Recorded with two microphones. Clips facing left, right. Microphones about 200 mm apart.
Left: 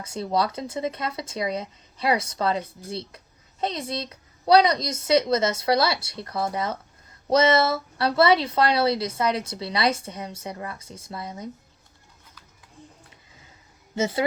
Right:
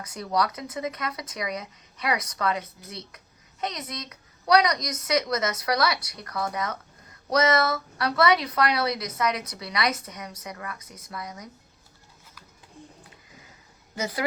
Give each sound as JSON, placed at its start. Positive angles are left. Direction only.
{"t": 0.0, "sound": "speech", "side_deg": 25}
{"t": 13.9, "sound": "speech", "side_deg": 25}